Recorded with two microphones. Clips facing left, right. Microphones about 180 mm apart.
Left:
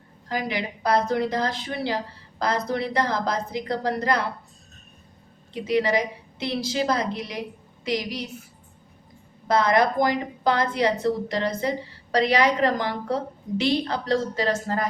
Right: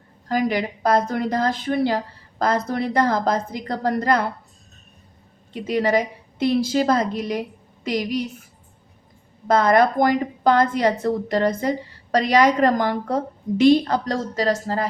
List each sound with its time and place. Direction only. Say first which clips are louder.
0.3 s a woman's voice: right 6 dB; 45° right (ahead or behind)
5.6 s a woman's voice: right 2 dB; 50° right (ahead or behind)
9.5 s a woman's voice: right 4 dB; 50° right (ahead or behind)